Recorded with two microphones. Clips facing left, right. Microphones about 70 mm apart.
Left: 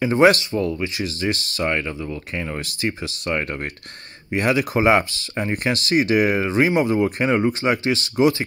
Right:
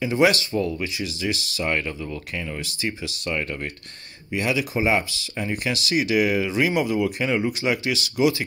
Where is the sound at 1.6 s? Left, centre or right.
Left.